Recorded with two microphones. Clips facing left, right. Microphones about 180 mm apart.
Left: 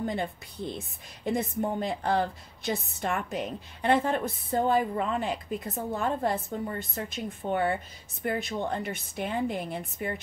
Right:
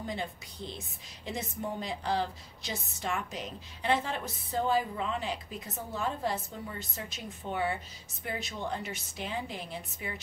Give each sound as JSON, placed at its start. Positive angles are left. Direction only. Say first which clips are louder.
{"t": 0.0, "sound": "a woman's voice", "louder": "left 6 dB", "side_deg": 55}